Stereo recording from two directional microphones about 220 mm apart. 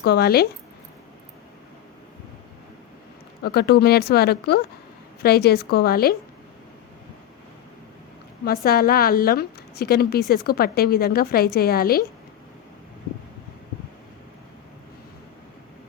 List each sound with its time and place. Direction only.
0.0 s a woman's voice: 45° left (ahead or behind)
3.4 s a woman's voice: 45° left (ahead or behind)
8.4 s a woman's voice: 45° left (ahead or behind)